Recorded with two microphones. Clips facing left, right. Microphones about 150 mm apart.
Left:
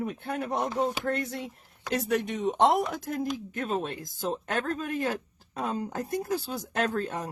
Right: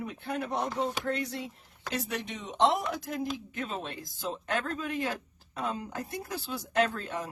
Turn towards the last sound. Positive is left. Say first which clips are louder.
# even
turn(degrees=40)  # may be behind; listen again after turning